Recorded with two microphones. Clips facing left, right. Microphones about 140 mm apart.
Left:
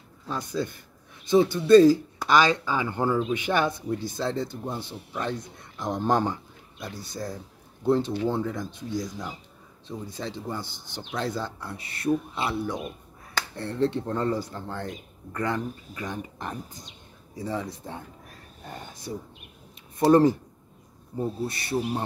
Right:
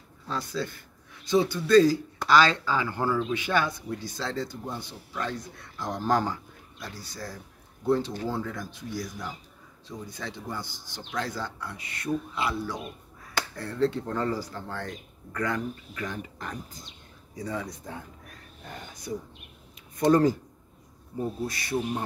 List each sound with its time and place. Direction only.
0.3 s a man's voice: 15° left (ahead or behind)
18.6 s a sound: 40° left (ahead or behind)
20.1 s a man's voice: 25° left (ahead or behind)
21.5 s a man's voice: 30° left (ahead or behind)